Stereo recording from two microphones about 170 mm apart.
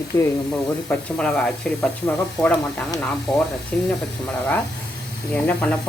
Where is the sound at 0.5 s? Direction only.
5° left (ahead or behind).